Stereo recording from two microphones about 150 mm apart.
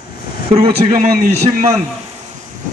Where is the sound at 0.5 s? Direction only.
40° right (ahead or behind).